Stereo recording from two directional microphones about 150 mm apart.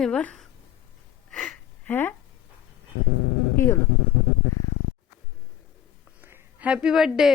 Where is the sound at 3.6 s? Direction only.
20° left (ahead or behind).